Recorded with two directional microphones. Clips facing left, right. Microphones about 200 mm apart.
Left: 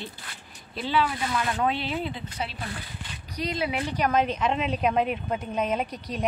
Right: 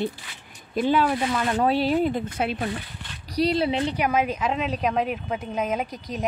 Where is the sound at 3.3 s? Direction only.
35° right (ahead or behind).